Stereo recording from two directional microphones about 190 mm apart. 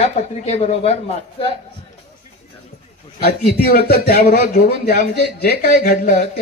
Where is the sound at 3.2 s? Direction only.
55° left (ahead or behind).